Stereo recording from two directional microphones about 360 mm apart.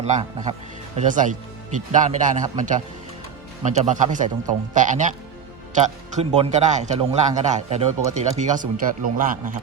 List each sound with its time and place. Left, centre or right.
0.0 s a man's voice: centre